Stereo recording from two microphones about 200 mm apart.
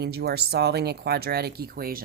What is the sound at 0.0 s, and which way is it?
Speech, 55° right (ahead or behind).